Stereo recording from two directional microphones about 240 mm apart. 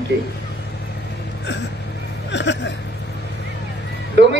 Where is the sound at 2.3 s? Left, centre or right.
Left.